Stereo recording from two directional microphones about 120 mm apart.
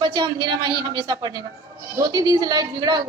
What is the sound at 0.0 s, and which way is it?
A woman's voice, 40° right (ahead or behind).